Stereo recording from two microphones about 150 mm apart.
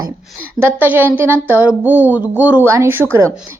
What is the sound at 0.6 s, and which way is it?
A woman's voice, 15° right (ahead or behind).